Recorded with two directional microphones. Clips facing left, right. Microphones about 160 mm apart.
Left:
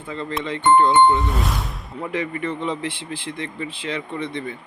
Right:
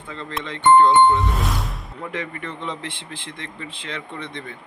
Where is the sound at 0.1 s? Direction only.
5° left (ahead or behind).